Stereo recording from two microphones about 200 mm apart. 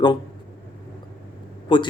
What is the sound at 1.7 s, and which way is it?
Speech, 25° left (ahead or behind).